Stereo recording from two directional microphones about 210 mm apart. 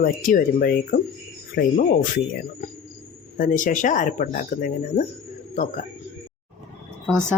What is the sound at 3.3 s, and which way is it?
Speech, 40° left (ahead or behind).